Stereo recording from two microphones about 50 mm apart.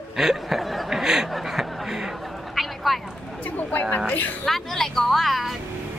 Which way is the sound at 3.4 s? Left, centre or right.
Left.